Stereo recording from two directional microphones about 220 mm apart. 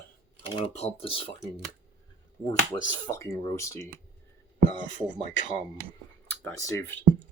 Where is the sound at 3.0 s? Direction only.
15° left (ahead or behind).